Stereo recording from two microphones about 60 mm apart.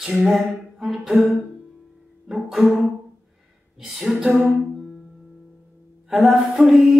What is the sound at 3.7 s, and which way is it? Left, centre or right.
Speech, centre.